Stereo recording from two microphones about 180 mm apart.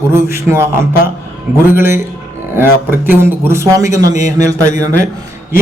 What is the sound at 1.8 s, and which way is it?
A man's voice, 15° right (ahead or behind).